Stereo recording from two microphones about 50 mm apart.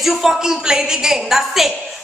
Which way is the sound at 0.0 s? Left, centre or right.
Centre.